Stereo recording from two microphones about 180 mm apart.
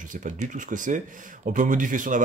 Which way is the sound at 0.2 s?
45° right (ahead or behind).